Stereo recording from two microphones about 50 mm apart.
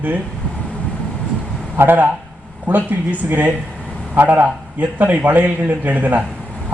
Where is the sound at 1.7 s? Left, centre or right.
Right.